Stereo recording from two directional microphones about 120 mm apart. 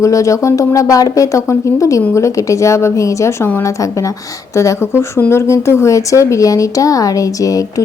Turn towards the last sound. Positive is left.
turn(degrees=30)  # may be behind; listen again after turning